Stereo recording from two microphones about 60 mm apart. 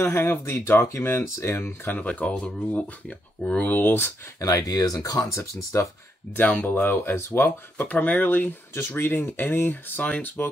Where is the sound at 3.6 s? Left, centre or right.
Left.